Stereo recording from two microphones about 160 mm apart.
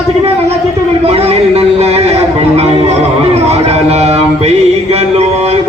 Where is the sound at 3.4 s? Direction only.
40° right (ahead or behind).